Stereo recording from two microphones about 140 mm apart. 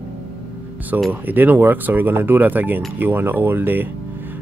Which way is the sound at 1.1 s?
15° right (ahead or behind).